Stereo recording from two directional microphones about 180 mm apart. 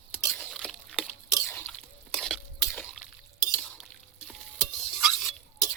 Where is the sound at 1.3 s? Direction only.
15° left (ahead or behind).